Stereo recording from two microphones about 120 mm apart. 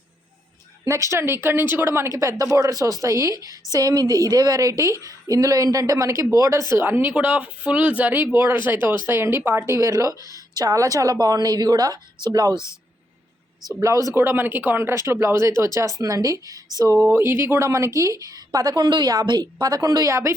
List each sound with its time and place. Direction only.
0.9 s speech: 25° right (ahead or behind)
10.2 s speech: 30° left (ahead or behind)
10.5 s a woman's voice: 30° right (ahead or behind)
13.7 s a woman's voice: 25° right (ahead or behind)